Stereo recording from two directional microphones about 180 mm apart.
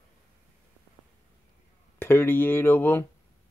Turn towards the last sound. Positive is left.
turn(degrees=10)  # may be behind; listen again after turning